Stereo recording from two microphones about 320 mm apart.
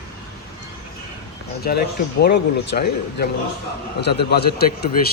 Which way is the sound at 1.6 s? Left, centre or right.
Left.